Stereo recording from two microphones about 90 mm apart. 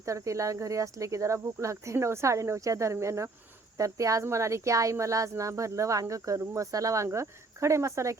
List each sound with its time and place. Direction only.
0.0 s a woman's voice: 35° right (ahead or behind)